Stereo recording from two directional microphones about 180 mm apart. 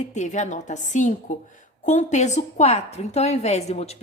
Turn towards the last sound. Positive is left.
turn(degrees=35)  # may be behind; listen again after turning